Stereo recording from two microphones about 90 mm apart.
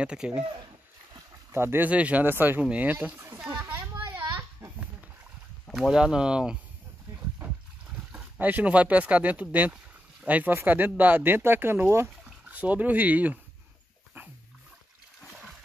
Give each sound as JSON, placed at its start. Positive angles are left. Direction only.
{"t": 0.0, "sound": "speech", "side_deg": -10}
{"t": 1.5, "sound": "speech", "side_deg": -25}
{"t": 1.9, "sound": "speech", "side_deg": -15}
{"t": 3.5, "sound": "a sound", "side_deg": -25}
{"t": 5.7, "sound": "speech", "side_deg": -5}
{"t": 8.1, "sound": "speech", "side_deg": -20}
{"t": 12.3, "sound": "speech", "side_deg": -15}